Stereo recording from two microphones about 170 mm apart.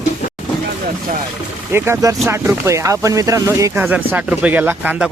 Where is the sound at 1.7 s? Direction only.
15° right (ahead or behind).